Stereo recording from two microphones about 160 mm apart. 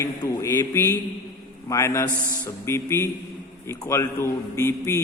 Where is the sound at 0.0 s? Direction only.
20° left (ahead or behind).